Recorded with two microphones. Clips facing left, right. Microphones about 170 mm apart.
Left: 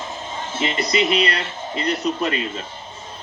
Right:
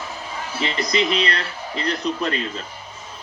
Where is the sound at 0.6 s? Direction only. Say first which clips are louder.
Left 1 dB; 5° left (ahead or behind).